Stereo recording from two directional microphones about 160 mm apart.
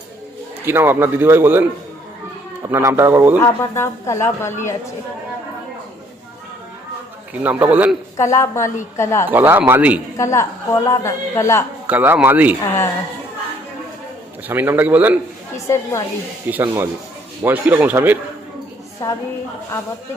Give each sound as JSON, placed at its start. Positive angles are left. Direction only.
{"t": 0.6, "sound": "a man's voice", "side_deg": -15}
{"t": 2.6, "sound": "a man's voice", "side_deg": -15}
{"t": 3.4, "sound": "a woman's voice", "side_deg": 15}
{"t": 7.4, "sound": "a man's voice", "side_deg": -10}
{"t": 8.2, "sound": "a woman's voice", "side_deg": 20}
{"t": 9.3, "sound": "a man's voice", "side_deg": -10}
{"t": 10.2, "sound": "a woman's voice", "side_deg": 15}
{"t": 11.9, "sound": "a man's voice", "side_deg": -10}
{"t": 14.4, "sound": "a man's voice", "side_deg": -15}
{"t": 15.5, "sound": "a woman's voice", "side_deg": 15}
{"t": 16.5, "sound": "a man's voice", "side_deg": -15}
{"t": 19.0, "sound": "a woman's voice", "side_deg": 20}